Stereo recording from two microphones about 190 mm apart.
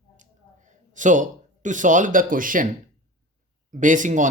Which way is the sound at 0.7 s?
40° right (ahead or behind).